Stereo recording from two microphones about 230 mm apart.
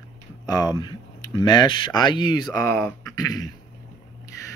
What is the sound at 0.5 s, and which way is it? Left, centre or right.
Speech, centre.